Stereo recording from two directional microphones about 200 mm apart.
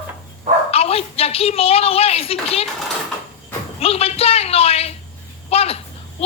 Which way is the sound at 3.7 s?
30° left (ahead or behind).